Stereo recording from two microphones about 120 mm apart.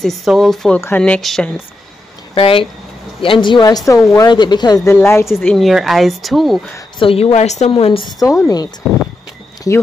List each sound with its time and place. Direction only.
0.0 s speech: centre (ahead or behind)
0.7 s a woman's voice: 20° left (ahead or behind)
1.0 s speech: 5° left (ahead or behind)
2.3 s a woman's voice: 50° left (ahead or behind); by 4.3 s 25° left (ahead or behind)
4.3 s speech: 40° left (ahead or behind)
4.9 s a woman's voice: 20° left (ahead or behind)
5.4 s speech: 5° left (ahead or behind)
7.0 s a woman's voice: 50° left (ahead or behind); by 7.7 s 70° left (ahead or behind)
7.7 s a woman's voice: 50° left (ahead or behind)
8.2 s speech: 30° left (ahead or behind)
8.8 s a sound: centre (ahead or behind)